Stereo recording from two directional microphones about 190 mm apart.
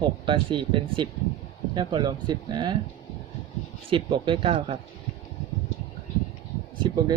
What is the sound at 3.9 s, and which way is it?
Speech, 25° right (ahead or behind).